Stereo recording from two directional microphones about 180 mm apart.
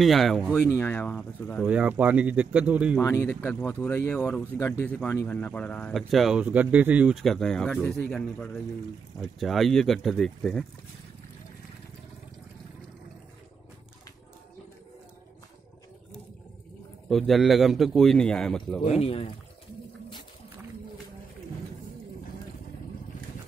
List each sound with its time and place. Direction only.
0.0 s speech: centre (ahead or behind)
0.7 s speech: 15° left (ahead or behind)
1.6 s speech: 5° right (ahead or behind)
3.0 s speech: 15° left (ahead or behind)
17.1 s speech: centre (ahead or behind)
18.9 s speech: 30° left (ahead or behind)